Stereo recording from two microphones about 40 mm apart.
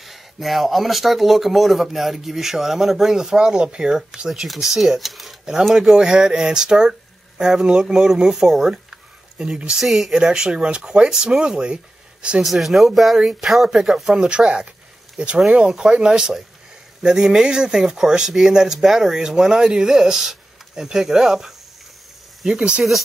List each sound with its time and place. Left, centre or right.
0.0 s speech: centre
5.8 s speech: centre
8.6 s a sound: centre
9.8 s speech: centre
10.1 s speech: centre
12.4 s speech: centre
14.1 s speech: right
22.5 s speech: right